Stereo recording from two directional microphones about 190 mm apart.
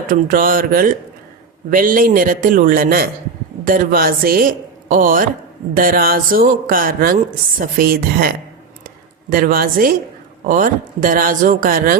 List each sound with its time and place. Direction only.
0.1 s speech: 45° right (ahead or behind)